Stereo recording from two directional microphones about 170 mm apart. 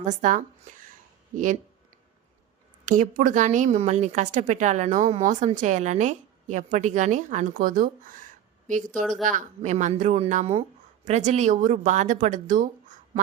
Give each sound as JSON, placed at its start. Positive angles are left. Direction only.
{"t": 0.0, "sound": "speech", "side_deg": -45}
{"t": 2.8, "sound": "a woman's voice", "side_deg": -50}
{"t": 9.2, "sound": "a woman's voice", "side_deg": -45}